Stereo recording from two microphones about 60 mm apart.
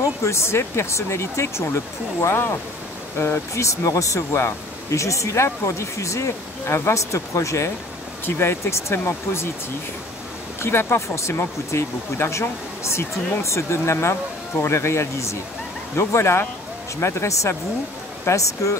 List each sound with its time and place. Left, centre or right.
0.0 s speech: left
2.2 s speech: left
3.2 s speech: left
10.6 s speech: left
18.2 s speech: left